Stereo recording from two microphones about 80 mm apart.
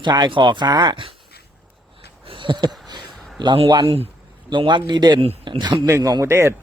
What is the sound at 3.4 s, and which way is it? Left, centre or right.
Speech, right.